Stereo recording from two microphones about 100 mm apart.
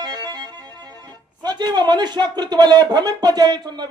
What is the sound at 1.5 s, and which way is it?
Speech, 45° right (ahead or behind).